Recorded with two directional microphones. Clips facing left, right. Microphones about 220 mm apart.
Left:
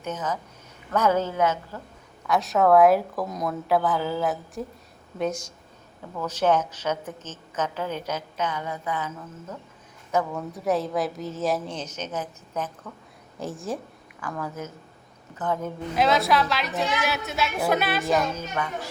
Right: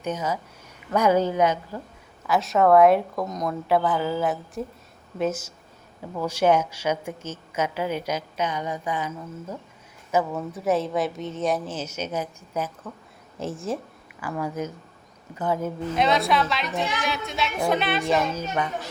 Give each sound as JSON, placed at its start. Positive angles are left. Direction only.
{"t": 0.0, "sound": "a woman's voice", "side_deg": -10}
{"t": 2.2, "sound": "a woman's voice", "side_deg": 0}
{"t": 13.4, "sound": "a woman's voice", "side_deg": 0}
{"t": 14.2, "sound": "a woman's voice", "side_deg": -10}
{"t": 18.3, "sound": "a child's voice", "side_deg": -20}